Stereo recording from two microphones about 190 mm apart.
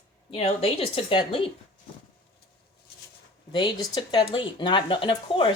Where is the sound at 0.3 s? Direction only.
30° left (ahead or behind).